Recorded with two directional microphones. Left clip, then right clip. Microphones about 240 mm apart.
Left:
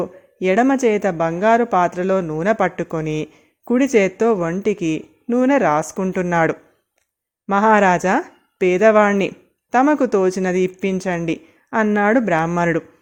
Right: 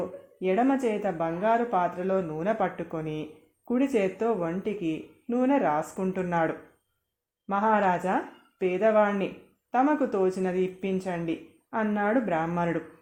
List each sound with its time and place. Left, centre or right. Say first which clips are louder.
0.0 s speech: left 9 dB; left